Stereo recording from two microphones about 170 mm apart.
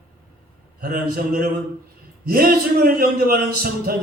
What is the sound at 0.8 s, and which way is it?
A man's voice, 60° right (ahead or behind).